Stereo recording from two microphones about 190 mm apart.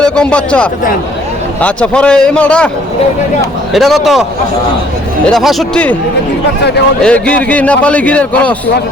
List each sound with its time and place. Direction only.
0.0 s a man's voice: 5° left (ahead or behind)
3.7 s a man's voice: centre (ahead or behind)
7.0 s a man's voice: 5° left (ahead or behind)